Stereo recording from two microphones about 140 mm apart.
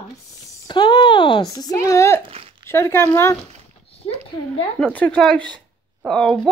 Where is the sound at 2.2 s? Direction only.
45° right (ahead or behind).